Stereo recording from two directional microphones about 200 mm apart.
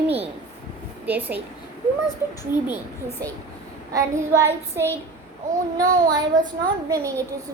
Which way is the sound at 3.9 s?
15° right (ahead or behind).